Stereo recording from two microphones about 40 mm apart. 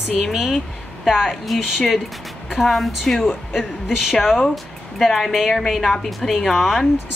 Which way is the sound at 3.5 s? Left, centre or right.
Centre.